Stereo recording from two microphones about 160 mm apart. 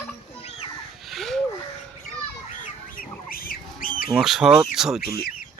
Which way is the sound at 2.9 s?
65° left (ahead or behind).